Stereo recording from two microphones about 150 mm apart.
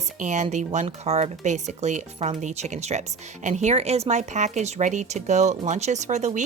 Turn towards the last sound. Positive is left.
turn(degrees=-50)  # may be behind; listen again after turning